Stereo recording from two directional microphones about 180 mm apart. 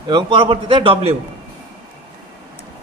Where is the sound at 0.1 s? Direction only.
25° right (ahead or behind).